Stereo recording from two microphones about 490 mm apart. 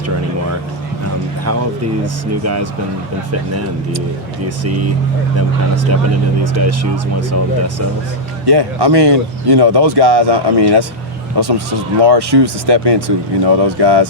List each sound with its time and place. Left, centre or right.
4.4 s speech: right
8.4 s speech: right